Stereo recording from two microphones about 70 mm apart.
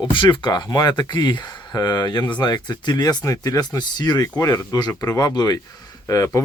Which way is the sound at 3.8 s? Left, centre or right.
Left.